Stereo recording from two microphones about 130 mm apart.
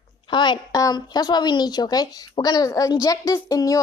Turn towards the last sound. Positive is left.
turn(degrees=25)  # may be behind; listen again after turning